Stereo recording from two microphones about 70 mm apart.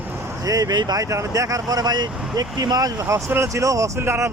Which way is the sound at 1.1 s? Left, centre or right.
Right.